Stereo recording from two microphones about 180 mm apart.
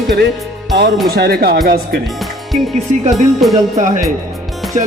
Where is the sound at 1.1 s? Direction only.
60° right (ahead or behind).